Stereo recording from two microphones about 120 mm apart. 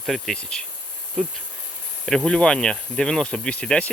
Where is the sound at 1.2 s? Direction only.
5° right (ahead or behind).